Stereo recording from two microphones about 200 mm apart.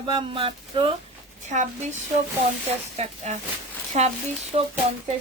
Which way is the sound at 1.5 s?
35° right (ahead or behind).